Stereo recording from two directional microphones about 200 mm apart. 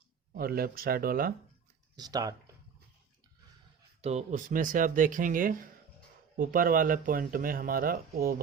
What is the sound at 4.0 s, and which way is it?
Speech, 35° right (ahead or behind).